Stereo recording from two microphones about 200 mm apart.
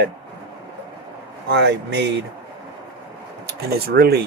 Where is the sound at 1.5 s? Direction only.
60° right (ahead or behind).